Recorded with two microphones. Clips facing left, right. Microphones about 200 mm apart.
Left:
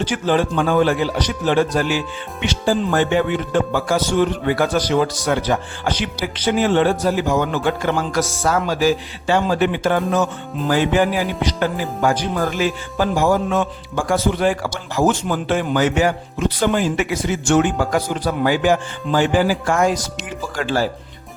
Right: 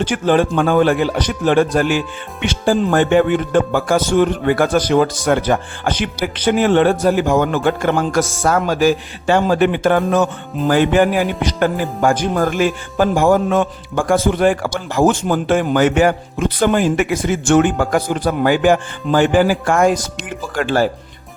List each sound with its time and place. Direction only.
0.0 s speech: 55° right (ahead or behind)